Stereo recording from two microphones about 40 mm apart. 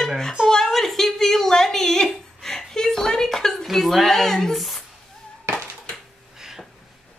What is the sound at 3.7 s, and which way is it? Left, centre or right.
Speech, centre.